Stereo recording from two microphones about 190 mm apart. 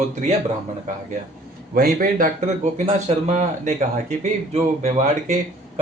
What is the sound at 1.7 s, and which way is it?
Speech, 50° right (ahead or behind).